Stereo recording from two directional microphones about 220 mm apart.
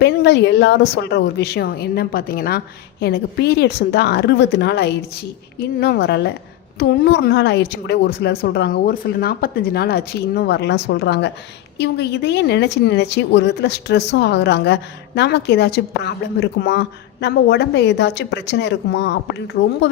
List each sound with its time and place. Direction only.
0.0 s a woman's voice: 50° left (ahead or behind)